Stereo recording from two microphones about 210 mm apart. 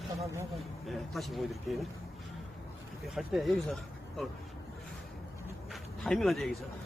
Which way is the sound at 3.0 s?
Centre (ahead or behind).